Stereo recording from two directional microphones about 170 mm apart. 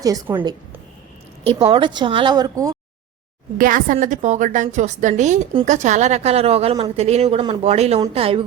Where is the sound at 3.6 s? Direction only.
55° right (ahead or behind).